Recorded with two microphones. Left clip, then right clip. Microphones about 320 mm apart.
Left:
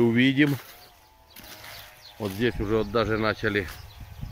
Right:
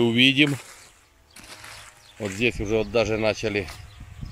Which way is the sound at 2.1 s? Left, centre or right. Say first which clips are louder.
Right 3 dB; centre.